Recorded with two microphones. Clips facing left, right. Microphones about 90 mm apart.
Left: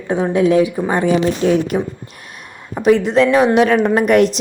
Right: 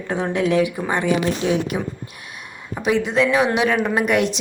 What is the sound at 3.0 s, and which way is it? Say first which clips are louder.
Speech: left 5 dB; 5° right (ahead or behind).